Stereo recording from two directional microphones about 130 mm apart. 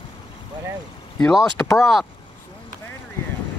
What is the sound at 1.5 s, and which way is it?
Speech, 20° left (ahead or behind).